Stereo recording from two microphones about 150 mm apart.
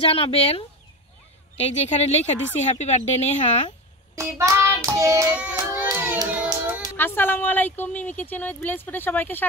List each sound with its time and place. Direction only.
0.0 s a woman's voice: 40° left (ahead or behind)
4.1 s hands: 20° right (ahead or behind)
5.3 s child singing: 10° right (ahead or behind)
7.0 s speech: 15° left (ahead or behind)